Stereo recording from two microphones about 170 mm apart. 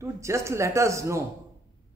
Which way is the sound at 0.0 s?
15° right (ahead or behind).